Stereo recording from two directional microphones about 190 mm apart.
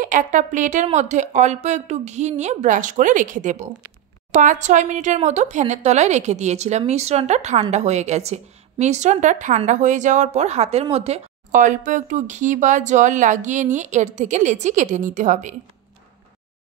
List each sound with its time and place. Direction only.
0.0 s a woman's voice: 40° right (ahead or behind)